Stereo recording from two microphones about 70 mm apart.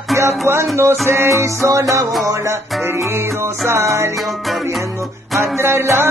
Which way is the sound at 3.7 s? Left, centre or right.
Right.